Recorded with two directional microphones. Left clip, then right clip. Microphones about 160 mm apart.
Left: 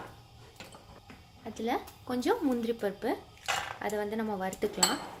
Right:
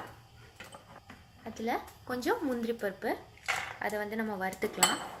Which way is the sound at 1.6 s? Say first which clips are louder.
Left 1 dB; 20° left (ahead or behind).